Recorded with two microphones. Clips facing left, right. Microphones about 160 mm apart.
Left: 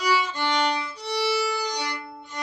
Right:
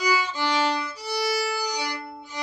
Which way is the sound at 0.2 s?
5° right (ahead or behind).